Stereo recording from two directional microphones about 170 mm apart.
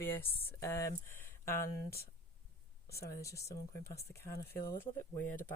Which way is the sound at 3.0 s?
15° left (ahead or behind).